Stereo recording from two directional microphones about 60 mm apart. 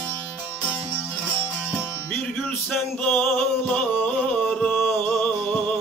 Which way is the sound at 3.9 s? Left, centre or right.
Centre.